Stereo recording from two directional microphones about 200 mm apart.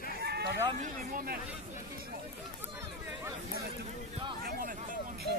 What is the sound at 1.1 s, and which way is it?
Speech, 50° right (ahead or behind).